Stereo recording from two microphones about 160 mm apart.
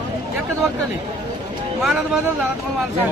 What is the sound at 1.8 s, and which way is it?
Speech, 5° right (ahead or behind).